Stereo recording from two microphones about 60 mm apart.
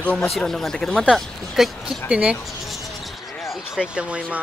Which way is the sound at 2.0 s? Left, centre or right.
Centre.